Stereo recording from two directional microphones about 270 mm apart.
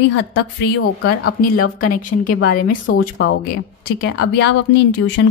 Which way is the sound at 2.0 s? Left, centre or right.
Left.